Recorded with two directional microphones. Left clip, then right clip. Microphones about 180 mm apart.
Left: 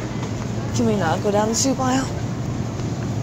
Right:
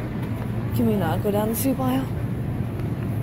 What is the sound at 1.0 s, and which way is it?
Speech, 5° right (ahead or behind).